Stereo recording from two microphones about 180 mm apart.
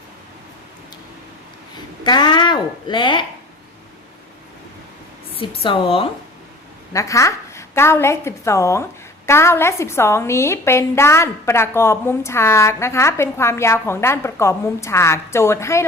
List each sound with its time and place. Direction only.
2.0 s speech: 25° left (ahead or behind)
5.4 s speech: 30° left (ahead or behind)
6.9 s a woman's voice: 15° left (ahead or behind)